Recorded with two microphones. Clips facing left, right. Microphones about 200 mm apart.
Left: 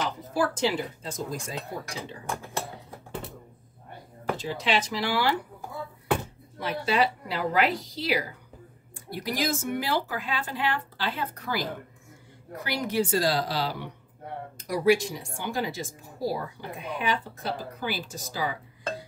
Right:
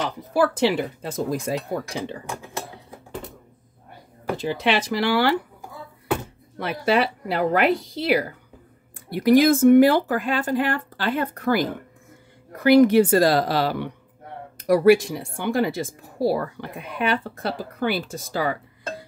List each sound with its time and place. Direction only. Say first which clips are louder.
0.0 s speech: right 6 dB; 65° right (ahead or behind)
4.4 s speech: right 6 dB; 60° right (ahead or behind)
6.6 s speech: right 4 dB; 60° right (ahead or behind)